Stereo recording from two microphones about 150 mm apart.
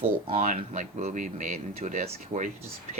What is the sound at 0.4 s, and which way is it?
Speech, 55° right (ahead or behind).